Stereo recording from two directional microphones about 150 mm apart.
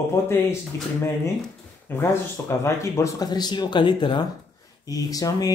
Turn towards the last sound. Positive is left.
turn(degrees=25)  # may be behind; listen again after turning